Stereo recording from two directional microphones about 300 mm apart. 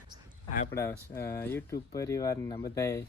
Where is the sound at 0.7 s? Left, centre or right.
Centre.